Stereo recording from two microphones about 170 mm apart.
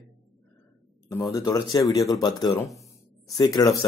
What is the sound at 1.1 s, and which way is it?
Speech, 20° left (ahead or behind).